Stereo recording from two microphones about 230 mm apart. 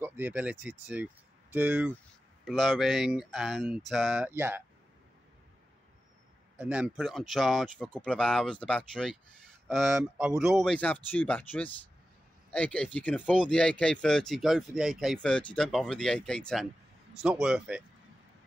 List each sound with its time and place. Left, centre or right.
0.0 s speech: centre
6.6 s speech: centre